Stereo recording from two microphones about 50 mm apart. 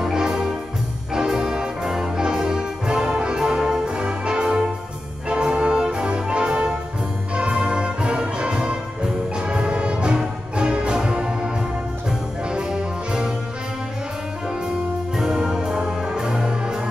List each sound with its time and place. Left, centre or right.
0.0 s music: centre
15.1 s music: centre